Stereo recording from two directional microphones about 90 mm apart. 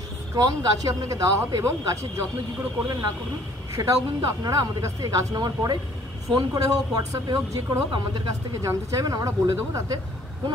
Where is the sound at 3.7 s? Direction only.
35° right (ahead or behind).